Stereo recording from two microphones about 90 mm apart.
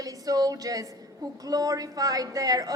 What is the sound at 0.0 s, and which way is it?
A woman's voice, 40° right (ahead or behind).